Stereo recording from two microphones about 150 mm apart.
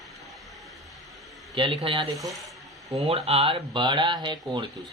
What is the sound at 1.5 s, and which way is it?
Speech, 35° right (ahead or behind).